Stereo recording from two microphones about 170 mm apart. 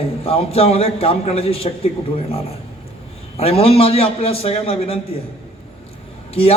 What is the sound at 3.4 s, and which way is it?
A man's voice, 35° left (ahead or behind).